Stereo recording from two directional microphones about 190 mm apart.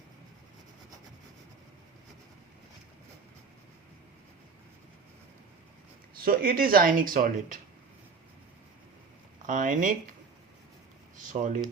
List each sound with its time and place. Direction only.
6.2 s speech: 50° right (ahead or behind)
9.5 s speech: 45° right (ahead or behind)
11.2 s speech: 40° right (ahead or behind)